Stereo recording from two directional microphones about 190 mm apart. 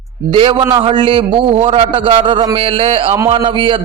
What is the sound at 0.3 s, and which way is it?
A man's voice, 25° right (ahead or behind).